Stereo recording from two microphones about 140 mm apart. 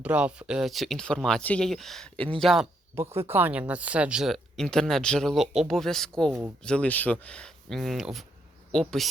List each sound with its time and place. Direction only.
0.0 s speech: 10° right (ahead or behind)
2.9 s speech: 20° right (ahead or behind); by 9.0 s 5° left (ahead or behind)